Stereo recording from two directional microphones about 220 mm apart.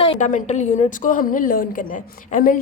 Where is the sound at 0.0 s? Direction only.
25° left (ahead or behind).